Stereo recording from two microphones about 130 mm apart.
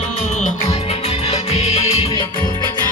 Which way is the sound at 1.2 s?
50° left (ahead or behind).